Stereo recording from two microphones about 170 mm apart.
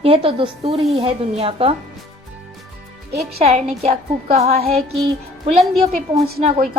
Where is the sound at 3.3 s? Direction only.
40° right (ahead or behind).